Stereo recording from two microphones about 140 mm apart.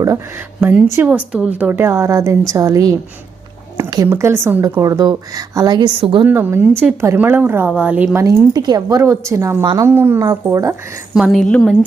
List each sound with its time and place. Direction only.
1.0 s a woman's voice: 10° right (ahead or behind); by 6.2 s 35° right (ahead or behind)
6.2 s a woman's voice: 15° right (ahead or behind)
8.2 s speech: 25° right (ahead or behind)
11.1 s a woman's voice: centre (ahead or behind)